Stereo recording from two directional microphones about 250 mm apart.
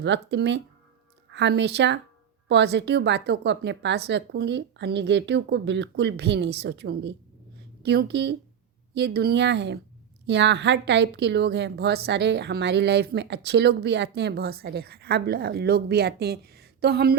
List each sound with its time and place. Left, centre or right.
0.0 s a woman's voice: right